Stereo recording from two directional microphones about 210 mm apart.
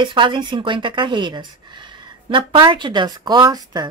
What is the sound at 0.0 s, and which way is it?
A woman's voice, 25° right (ahead or behind).